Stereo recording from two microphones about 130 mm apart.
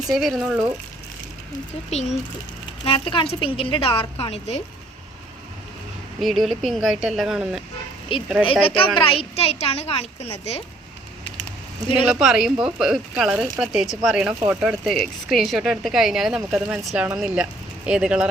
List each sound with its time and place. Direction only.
0.1 s speech: centre (ahead or behind)
1.9 s a child's voice: 60° left (ahead or behind)
2.8 s a woman's voice: 45° left (ahead or behind)
6.1 s speech: centre (ahead or behind)
8.1 s a woman's voice: 40° left (ahead or behind); by 10.6 s 60° left (ahead or behind)
12.0 s speech: 5° right (ahead or behind)